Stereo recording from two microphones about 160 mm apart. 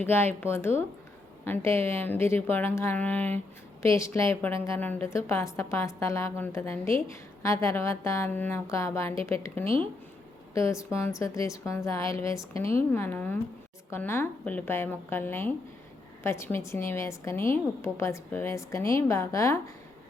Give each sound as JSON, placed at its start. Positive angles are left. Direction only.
{"t": 0.0, "sound": "a woman's voice", "side_deg": 15}
{"t": 9.6, "sound": "speech", "side_deg": -35}
{"t": 10.5, "sound": "a woman's voice", "side_deg": 20}